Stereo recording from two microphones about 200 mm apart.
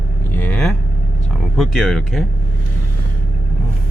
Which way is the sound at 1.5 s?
Centre (ahead or behind).